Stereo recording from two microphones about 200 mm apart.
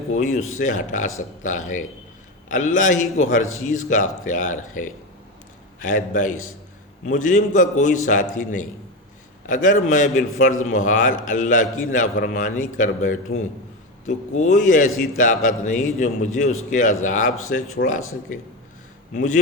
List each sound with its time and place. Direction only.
0.1 s a man's voice: 35° left (ahead or behind)
17.8 s speech: 55° left (ahead or behind)
19.1 s a man's voice: 40° left (ahead or behind)